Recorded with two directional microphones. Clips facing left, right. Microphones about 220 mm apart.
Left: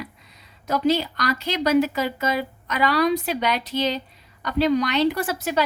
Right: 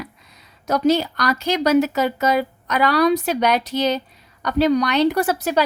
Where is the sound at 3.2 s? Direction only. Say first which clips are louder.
Right 5 dB; 45° right (ahead or behind).